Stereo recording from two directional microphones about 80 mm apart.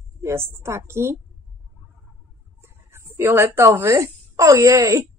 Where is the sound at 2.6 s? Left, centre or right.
Right.